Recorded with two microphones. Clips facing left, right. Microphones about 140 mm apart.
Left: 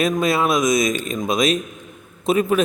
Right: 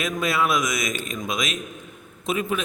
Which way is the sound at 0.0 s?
25° left (ahead or behind).